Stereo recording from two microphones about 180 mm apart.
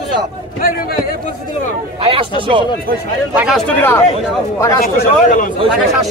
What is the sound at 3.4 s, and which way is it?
Speech, centre (ahead or behind).